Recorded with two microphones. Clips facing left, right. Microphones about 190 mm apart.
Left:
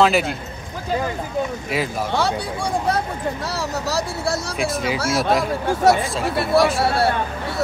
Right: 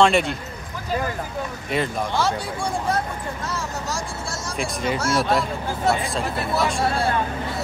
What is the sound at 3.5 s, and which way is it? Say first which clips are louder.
Speech: left 5 dB; 65° left (ahead or behind).